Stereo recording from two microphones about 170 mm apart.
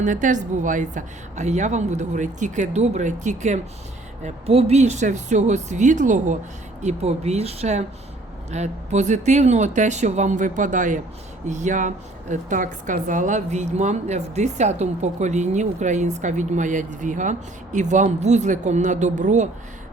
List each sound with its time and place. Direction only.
0.0 s a woman's voice: 45° right (ahead or behind)